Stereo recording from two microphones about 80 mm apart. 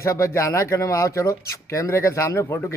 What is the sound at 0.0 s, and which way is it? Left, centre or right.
Speech, left.